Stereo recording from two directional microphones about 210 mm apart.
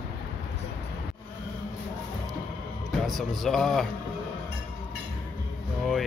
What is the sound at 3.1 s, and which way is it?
Speech, centre (ahead or behind).